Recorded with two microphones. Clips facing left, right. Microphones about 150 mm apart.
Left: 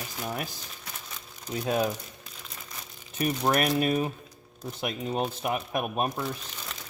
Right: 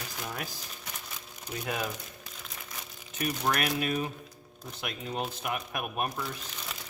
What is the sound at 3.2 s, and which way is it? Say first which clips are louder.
Speech: left 5 dB; 30° left (ahead or behind).